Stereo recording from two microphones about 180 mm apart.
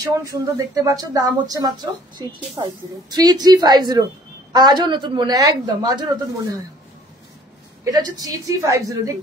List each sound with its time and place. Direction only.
0.0 s a woman's voice: 20° right (ahead or behind)
7.8 s a woman's voice: 20° right (ahead or behind)